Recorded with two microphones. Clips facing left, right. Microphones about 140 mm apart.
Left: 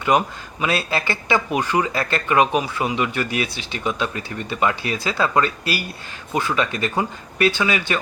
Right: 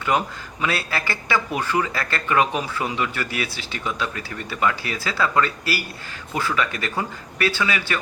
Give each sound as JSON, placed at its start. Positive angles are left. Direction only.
{"t": 0.1, "sound": "a man's voice", "side_deg": 15}